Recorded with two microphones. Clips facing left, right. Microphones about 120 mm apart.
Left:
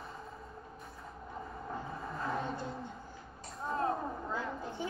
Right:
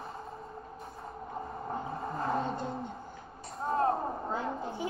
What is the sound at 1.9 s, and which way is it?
Music, 35° right (ahead or behind).